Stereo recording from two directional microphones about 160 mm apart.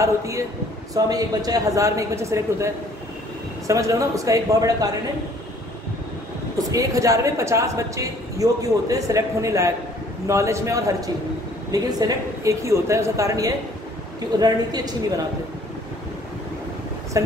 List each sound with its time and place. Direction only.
0.0 s a man's voice: 20° right (ahead or behind)
6.7 s a man's voice: 20° right (ahead or behind)